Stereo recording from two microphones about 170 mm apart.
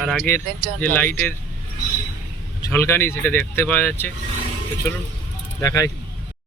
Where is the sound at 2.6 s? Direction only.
15° left (ahead or behind).